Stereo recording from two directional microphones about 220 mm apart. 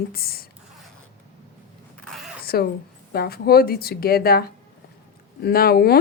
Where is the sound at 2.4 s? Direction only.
45° left (ahead or behind).